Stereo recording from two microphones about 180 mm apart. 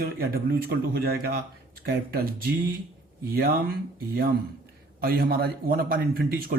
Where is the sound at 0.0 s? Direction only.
60° right (ahead or behind).